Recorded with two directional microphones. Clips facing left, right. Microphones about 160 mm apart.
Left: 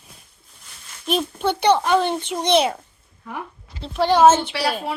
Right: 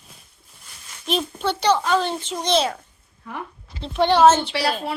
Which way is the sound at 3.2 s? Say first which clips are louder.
Left 1 dB; 5° left (ahead or behind).